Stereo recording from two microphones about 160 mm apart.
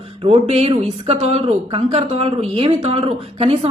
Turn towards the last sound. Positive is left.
turn(degrees=-35)  # may be behind; listen again after turning